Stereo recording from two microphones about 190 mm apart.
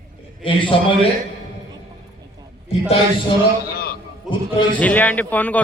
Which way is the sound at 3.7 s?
55° left (ahead or behind).